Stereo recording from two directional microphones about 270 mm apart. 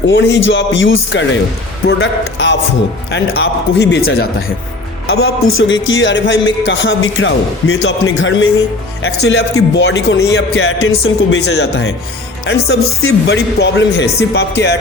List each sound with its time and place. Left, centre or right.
0.1 s a man's voice: left
5.0 s a man's voice: left